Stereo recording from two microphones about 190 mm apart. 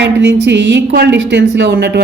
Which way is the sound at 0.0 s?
65° right (ahead or behind).